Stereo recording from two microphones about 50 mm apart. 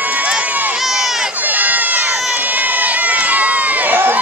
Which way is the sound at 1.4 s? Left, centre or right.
Right.